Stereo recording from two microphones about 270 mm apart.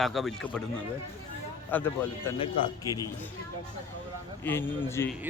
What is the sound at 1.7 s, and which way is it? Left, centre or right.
Speech, centre.